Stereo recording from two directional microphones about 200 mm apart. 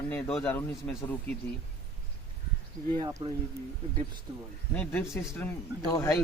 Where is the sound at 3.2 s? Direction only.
25° right (ahead or behind).